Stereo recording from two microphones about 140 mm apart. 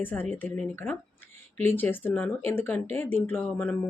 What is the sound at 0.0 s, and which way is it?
A woman's voice, 15° left (ahead or behind).